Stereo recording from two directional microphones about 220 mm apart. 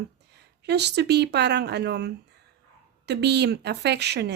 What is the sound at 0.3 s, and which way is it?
Speech, 50° right (ahead or behind).